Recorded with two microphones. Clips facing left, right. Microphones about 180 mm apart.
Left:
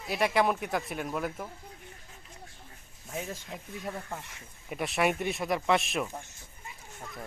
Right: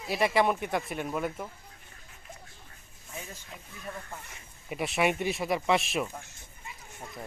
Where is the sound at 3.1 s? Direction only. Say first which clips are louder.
Left 6 dB; 65° left (ahead or behind).